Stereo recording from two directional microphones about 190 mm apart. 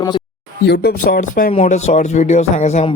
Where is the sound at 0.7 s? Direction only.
60° left (ahead or behind).